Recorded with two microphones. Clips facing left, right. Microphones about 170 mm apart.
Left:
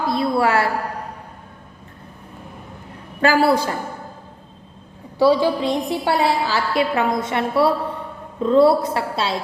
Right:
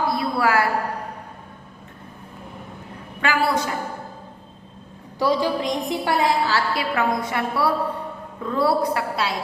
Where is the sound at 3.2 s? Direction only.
35° left (ahead or behind).